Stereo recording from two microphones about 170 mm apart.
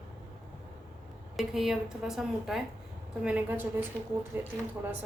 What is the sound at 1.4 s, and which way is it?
A woman's voice, centre (ahead or behind).